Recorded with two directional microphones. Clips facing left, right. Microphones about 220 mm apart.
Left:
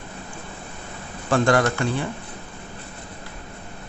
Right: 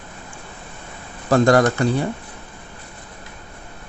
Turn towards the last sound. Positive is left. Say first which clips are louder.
# right 5 dB
turn(degrees=-40)  # may be behind; listen again after turning